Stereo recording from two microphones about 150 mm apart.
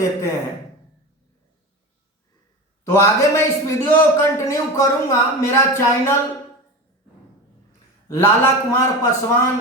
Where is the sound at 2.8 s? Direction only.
20° left (ahead or behind).